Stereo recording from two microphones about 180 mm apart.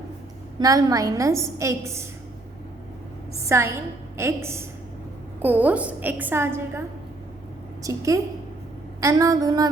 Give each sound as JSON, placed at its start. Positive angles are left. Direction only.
{"t": 0.6, "sound": "a woman's voice", "side_deg": -20}
{"t": 3.4, "sound": "a woman's voice", "side_deg": -15}
{"t": 9.0, "sound": "a sound", "side_deg": -20}